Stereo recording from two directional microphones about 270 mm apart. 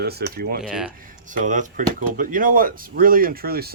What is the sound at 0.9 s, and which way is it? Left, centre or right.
Speech, right.